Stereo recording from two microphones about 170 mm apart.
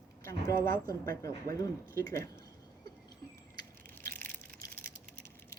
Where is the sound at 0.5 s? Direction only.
55° right (ahead or behind).